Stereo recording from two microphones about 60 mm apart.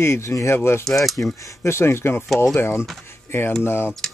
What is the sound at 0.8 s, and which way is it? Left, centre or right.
Speech, centre.